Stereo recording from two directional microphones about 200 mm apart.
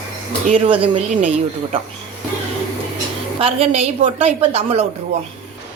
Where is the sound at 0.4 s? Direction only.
30° right (ahead or behind).